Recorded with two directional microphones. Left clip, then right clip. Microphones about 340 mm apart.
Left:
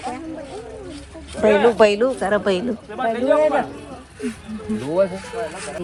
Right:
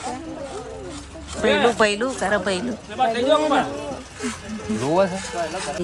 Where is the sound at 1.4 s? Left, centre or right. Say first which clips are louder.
Left 3 dB; centre.